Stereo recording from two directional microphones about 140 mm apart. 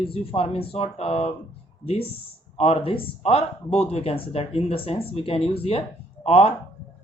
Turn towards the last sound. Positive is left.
turn(degrees=45)  # may be behind; listen again after turning